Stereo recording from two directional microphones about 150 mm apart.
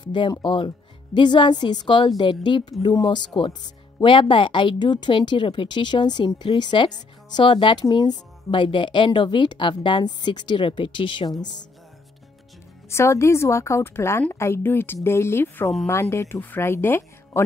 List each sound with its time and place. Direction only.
0.0 s speech: 30° left (ahead or behind)
12.9 s a woman's voice: 20° left (ahead or behind)